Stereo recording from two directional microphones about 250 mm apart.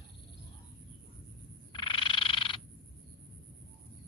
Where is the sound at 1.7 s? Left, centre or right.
Centre.